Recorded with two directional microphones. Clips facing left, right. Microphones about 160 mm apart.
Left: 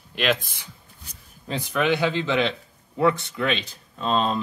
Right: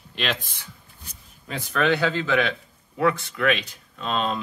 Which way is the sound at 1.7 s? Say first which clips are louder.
Even; 15° left (ahead or behind).